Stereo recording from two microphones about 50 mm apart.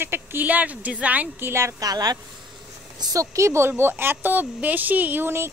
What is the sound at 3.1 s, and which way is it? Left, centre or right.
Speech, right.